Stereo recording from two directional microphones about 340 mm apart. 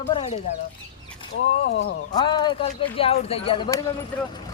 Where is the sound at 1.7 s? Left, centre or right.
Left.